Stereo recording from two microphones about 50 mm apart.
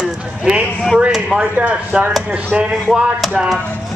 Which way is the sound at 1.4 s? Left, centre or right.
Right.